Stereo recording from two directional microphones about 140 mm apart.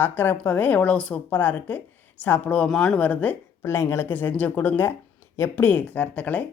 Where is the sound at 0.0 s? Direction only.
15° left (ahead or behind).